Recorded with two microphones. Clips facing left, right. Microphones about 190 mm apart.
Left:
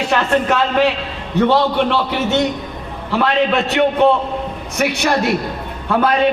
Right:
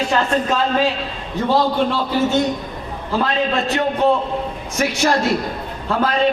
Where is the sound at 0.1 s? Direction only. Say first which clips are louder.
Left 6 dB; 70° left (ahead or behind).